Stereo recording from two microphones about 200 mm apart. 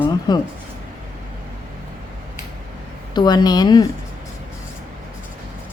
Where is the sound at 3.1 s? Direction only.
20° left (ahead or behind).